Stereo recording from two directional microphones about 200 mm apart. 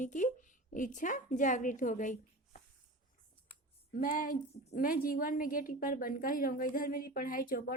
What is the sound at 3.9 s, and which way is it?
A woman's voice, 45° left (ahead or behind).